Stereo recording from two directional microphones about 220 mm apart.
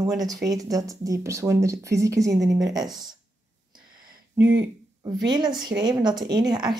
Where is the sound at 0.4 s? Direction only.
15° right (ahead or behind).